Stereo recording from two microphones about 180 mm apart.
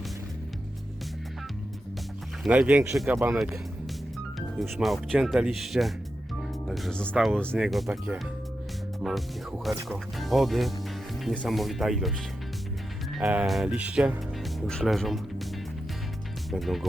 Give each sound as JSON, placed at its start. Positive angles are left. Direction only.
{"t": 2.4, "sound": "speech", "side_deg": -5}
{"t": 13.1, "sound": "speech", "side_deg": -5}
{"t": 16.5, "sound": "speech", "side_deg": 0}